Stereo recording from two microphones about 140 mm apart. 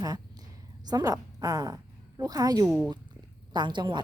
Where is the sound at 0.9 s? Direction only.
25° right (ahead or behind).